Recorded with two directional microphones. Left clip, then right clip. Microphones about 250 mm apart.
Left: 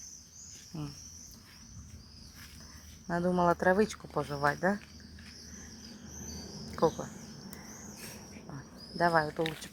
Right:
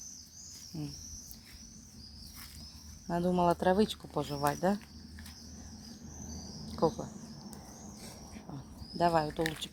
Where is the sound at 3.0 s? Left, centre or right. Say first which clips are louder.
Left 1 dB; centre.